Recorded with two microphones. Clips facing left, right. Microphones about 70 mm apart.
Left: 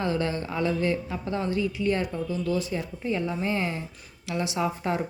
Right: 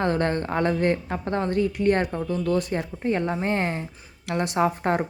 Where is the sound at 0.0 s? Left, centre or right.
Right.